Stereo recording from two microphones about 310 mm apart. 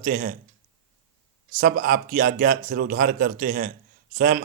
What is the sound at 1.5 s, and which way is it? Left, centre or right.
A man's voice, right.